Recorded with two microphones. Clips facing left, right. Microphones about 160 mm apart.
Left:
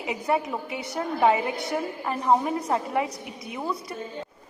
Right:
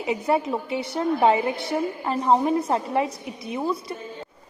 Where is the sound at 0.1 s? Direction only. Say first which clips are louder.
Right 3 dB; 30° right (ahead or behind).